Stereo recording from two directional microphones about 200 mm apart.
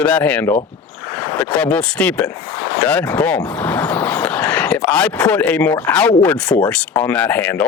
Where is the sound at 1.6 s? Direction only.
5° left (ahead or behind).